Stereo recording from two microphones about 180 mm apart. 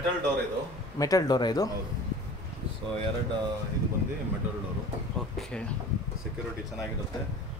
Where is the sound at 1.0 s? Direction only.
20° left (ahead or behind).